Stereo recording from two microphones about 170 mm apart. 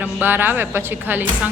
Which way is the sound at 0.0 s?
10° right (ahead or behind).